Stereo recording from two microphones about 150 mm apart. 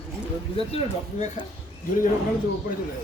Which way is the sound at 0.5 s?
45° left (ahead or behind).